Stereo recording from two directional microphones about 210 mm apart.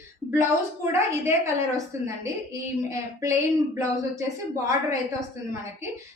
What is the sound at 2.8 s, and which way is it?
Speech, 15° right (ahead or behind).